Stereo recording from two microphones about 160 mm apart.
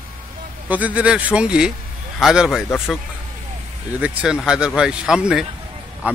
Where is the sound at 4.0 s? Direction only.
5° right (ahead or behind).